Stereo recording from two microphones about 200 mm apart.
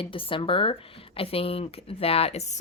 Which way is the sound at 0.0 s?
25° left (ahead or behind).